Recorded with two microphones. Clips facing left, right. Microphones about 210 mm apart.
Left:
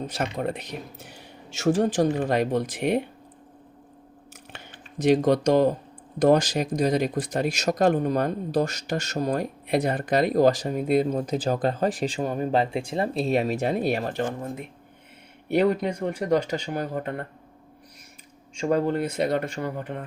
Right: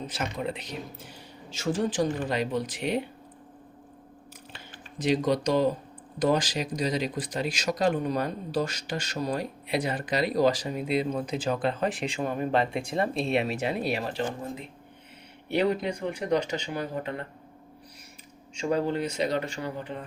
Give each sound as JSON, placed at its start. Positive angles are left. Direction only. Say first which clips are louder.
{"t": 0.0, "sound": "speech", "louder": "left 4 dB", "side_deg": 50}
{"t": 1.1, "sound": "speech", "louder": "left 1 dB", "side_deg": 70}
{"t": 5.0, "sound": "speech", "louder": "left 5 dB", "side_deg": 50}
{"t": 18.5, "sound": "speech", "louder": "left 3 dB", "side_deg": 50}